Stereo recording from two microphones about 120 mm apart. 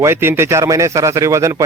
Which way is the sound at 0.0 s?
20° right (ahead or behind).